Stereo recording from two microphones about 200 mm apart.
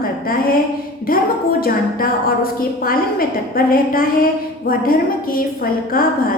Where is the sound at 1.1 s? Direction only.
45° left (ahead or behind).